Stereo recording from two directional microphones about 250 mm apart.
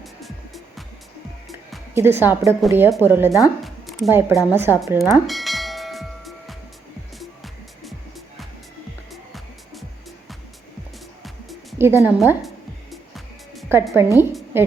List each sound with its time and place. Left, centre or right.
0.0 s music: centre
1.5 s speech: centre
3.6 s music: centre
11.2 s music: centre
14.2 s a woman's voice: centre